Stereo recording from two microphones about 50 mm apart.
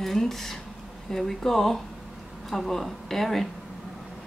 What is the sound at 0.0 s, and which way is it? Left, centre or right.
Speech, centre.